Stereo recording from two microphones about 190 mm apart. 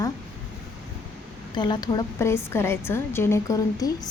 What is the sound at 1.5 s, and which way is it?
A woman's voice, 20° left (ahead or behind).